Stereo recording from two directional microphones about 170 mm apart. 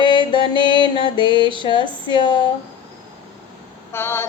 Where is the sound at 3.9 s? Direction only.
15° left (ahead or behind).